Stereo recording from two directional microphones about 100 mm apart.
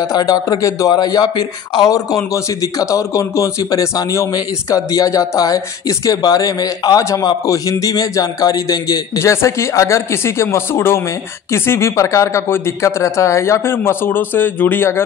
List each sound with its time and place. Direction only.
0.0 s speech: 40° left (ahead or behind)